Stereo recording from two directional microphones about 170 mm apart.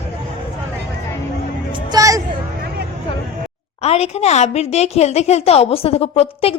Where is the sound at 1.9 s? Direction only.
20° right (ahead or behind).